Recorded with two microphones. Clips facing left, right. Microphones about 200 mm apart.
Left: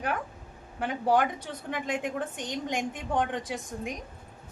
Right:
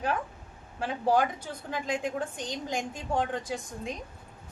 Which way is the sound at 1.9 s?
20° left (ahead or behind).